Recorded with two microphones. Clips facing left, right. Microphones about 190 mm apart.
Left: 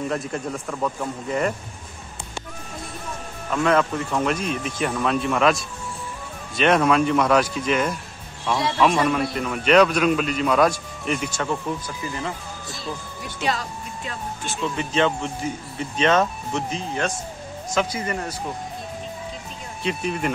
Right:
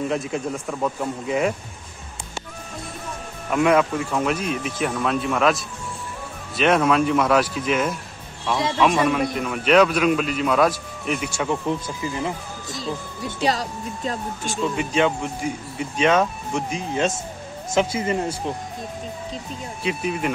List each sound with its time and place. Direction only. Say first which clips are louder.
0.1 s speech: right 2 dB; 5° right (ahead or behind)
3.4 s speech: right 2 dB; 10° right (ahead or behind)
13.2 s speech: right 3 dB; 35° right (ahead or behind)
14.4 s speech: right 2 dB; 10° right (ahead or behind)
19.8 s speech: even; 5° right (ahead or behind)